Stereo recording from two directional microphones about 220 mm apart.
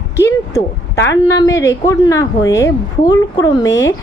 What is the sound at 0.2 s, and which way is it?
A woman's voice, 15° left (ahead or behind).